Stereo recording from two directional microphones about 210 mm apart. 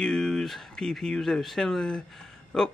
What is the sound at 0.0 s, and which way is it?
Speech, 5° left (ahead or behind).